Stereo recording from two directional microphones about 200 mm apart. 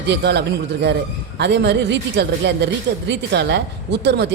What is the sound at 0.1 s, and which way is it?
A woman's voice, 55° right (ahead or behind).